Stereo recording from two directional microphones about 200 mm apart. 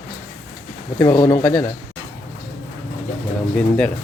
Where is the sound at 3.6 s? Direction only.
5° left (ahead or behind).